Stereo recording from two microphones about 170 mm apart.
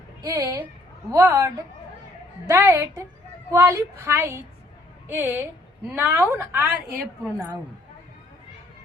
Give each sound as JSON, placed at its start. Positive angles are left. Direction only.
{"t": 0.3, "sound": "a woman's voice", "side_deg": -15}
{"t": 2.5, "sound": "a woman's voice", "side_deg": -15}